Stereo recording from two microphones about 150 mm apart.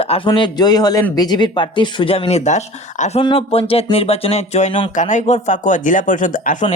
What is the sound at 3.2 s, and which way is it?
Speech, 40° left (ahead or behind).